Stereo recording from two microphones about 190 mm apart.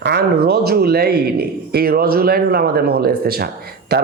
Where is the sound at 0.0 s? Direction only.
60° right (ahead or behind).